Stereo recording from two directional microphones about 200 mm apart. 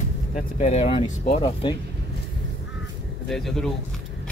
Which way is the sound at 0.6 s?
35° left (ahead or behind).